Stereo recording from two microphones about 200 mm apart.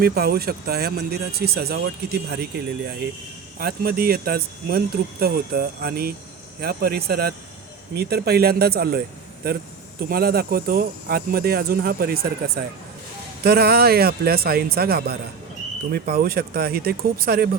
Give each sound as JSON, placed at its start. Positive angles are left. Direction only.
{"t": 0.0, "sound": "speech", "side_deg": -50}
{"t": 3.6, "sound": "speech", "side_deg": -50}
{"t": 10.0, "sound": "speech", "side_deg": -50}